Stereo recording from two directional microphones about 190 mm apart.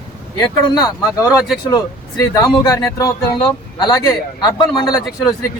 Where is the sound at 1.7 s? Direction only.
20° left (ahead or behind).